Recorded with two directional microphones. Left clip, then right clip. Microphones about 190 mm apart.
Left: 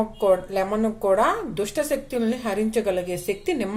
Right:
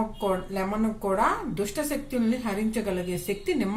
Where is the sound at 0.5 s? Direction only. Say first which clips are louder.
Left 6 dB; 40° left (ahead or behind).